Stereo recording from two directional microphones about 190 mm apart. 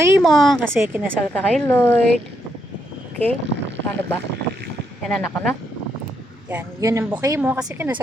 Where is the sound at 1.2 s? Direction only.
5° left (ahead or behind).